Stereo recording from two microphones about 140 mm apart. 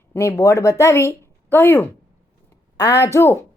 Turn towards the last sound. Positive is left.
turn(degrees=20)  # may be behind; listen again after turning